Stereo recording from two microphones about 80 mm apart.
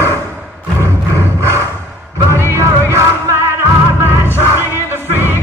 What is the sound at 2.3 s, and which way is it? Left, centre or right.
Music, right.